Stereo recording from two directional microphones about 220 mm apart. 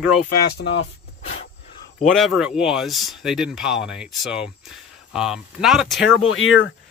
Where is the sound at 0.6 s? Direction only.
50° left (ahead or behind).